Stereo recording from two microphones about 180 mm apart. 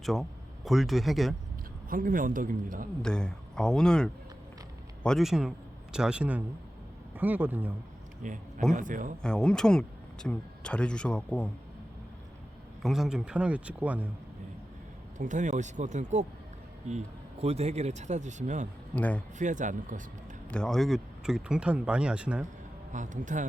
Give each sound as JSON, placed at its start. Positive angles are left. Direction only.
{"t": 0.0, "sound": "speech", "side_deg": 0}
{"t": 1.9, "sound": "a man's voice", "side_deg": -50}
{"t": 3.0, "sound": "a man's voice", "side_deg": 5}
{"t": 8.2, "sound": "a man's voice", "side_deg": -45}
{"t": 9.2, "sound": "speech", "side_deg": 5}
{"t": 12.8, "sound": "speech", "side_deg": 0}
{"t": 15.2, "sound": "speech", "side_deg": -45}
{"t": 17.4, "sound": "speech", "side_deg": -35}
{"t": 18.9, "sound": "speech", "side_deg": 10}
{"t": 19.4, "sound": "a man's voice", "side_deg": -45}
{"t": 20.5, "sound": "speech", "side_deg": 5}
{"t": 22.9, "sound": "a man's voice", "side_deg": -45}